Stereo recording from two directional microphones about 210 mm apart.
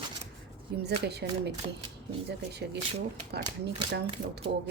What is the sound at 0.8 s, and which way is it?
Speech, 55° right (ahead or behind).